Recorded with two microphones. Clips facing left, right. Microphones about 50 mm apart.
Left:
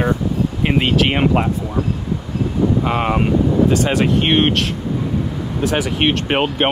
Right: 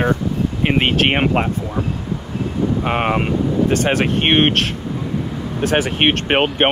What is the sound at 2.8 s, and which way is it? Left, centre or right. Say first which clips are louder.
Speech: left 1 dB; right.